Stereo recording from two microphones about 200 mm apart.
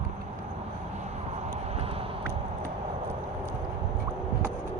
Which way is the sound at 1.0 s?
35° right (ahead or behind).